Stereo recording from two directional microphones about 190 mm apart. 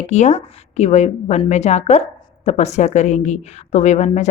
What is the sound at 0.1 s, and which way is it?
A woman's voice, 35° left (ahead or behind).